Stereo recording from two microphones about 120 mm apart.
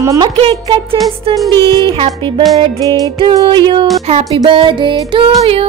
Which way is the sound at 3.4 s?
40° right (ahead or behind).